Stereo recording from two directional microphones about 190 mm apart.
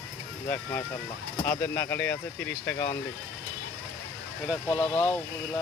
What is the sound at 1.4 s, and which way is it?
Speech, 10° left (ahead or behind).